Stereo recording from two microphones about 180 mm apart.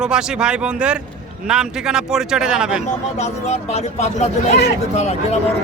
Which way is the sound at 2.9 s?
40° left (ahead or behind).